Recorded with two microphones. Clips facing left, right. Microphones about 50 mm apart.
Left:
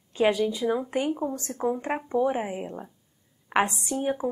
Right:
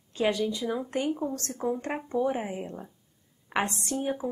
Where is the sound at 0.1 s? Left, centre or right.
Centre.